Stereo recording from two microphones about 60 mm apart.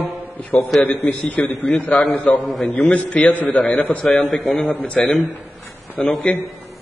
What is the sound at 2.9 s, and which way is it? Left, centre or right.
A man's voice, centre.